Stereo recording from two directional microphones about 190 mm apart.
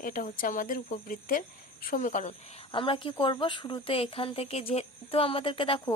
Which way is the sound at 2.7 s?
25° left (ahead or behind).